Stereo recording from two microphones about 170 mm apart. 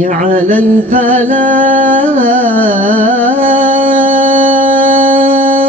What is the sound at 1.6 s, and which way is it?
Carnatic music, 50° right (ahead or behind).